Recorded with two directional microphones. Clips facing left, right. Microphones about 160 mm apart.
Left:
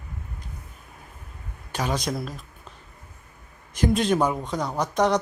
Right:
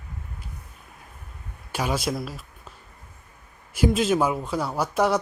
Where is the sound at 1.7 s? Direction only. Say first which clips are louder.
Right 1 dB; 10° right (ahead or behind).